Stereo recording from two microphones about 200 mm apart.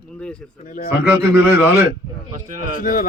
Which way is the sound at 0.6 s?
45° left (ahead or behind).